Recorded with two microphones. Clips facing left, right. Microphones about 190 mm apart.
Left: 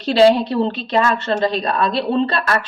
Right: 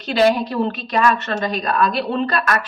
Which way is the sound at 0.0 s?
30° left (ahead or behind).